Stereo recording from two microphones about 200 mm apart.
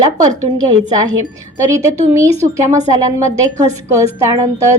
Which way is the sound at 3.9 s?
15° right (ahead or behind).